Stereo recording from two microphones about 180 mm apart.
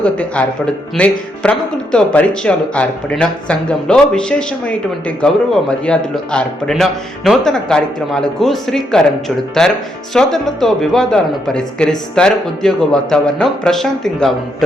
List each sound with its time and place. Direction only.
0.0 s speech: 5° left (ahead or behind)